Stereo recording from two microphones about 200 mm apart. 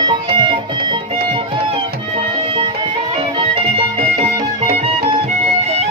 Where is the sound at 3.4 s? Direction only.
30° right (ahead or behind).